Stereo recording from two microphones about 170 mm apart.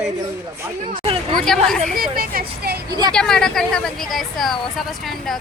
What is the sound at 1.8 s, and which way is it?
Speech, 60° right (ahead or behind).